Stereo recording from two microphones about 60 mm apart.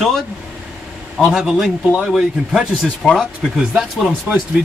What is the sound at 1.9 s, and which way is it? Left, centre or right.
Speech, centre.